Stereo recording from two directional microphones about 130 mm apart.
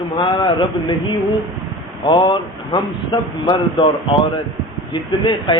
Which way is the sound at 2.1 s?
40° left (ahead or behind).